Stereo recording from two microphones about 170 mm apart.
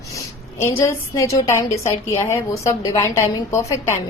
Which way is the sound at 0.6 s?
15° left (ahead or behind).